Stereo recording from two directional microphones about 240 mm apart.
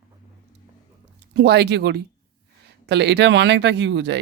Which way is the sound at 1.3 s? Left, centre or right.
Right.